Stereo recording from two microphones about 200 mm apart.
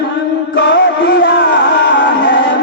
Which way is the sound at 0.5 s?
60° left (ahead or behind).